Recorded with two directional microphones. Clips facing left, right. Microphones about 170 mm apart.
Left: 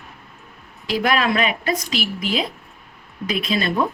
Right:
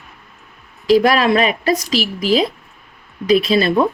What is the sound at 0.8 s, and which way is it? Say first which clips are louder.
A woman's voice: right 7 dB; 35° right (ahead or behind).